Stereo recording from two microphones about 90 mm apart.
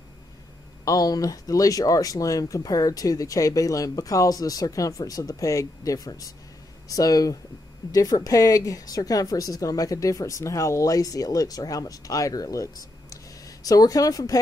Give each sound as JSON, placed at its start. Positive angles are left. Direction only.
{"t": 0.8, "sound": "a woman's voice", "side_deg": 45}